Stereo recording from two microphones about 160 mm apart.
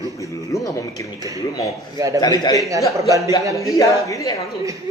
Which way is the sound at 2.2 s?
25° left (ahead or behind).